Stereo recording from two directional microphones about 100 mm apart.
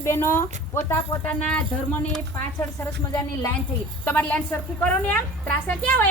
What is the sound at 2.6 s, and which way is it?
Speech, 25° left (ahead or behind).